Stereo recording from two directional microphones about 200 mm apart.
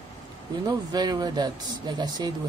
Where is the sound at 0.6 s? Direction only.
20° right (ahead or behind).